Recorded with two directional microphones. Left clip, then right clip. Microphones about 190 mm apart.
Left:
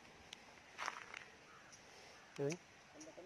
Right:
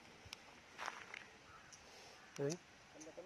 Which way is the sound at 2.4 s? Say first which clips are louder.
Even; 20° right (ahead or behind).